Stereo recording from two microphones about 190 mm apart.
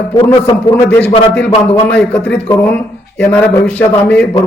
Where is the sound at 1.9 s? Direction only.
5° left (ahead or behind).